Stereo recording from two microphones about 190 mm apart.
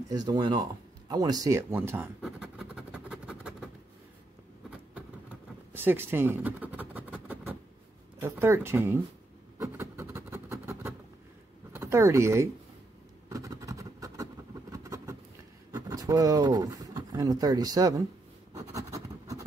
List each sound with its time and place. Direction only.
0.1 s a sound: 20° right (ahead or behind); by 3.7 s 5° right (ahead or behind)
5.7 s scratch: 10° right (ahead or behind)
8.2 s speech: 15° right (ahead or behind)
9.6 s a sound: 15° right (ahead or behind)
11.7 s speech: 15° right (ahead or behind)
13.3 s vehicle: 15° right (ahead or behind)
15.7 s speech: 20° right (ahead or behind)
18.7 s scratch: 15° right (ahead or behind)